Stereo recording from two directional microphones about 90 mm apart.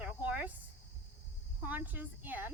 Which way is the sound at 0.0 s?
15° right (ahead or behind).